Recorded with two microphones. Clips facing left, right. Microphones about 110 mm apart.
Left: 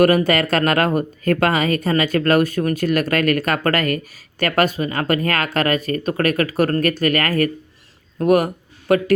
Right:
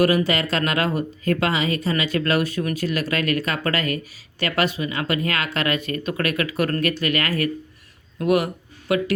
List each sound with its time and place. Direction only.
0.0 s speech: 55° left (ahead or behind)